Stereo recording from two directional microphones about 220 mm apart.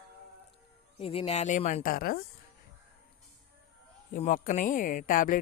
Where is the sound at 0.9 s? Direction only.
25° left (ahead or behind); by 2.2 s 40° left (ahead or behind).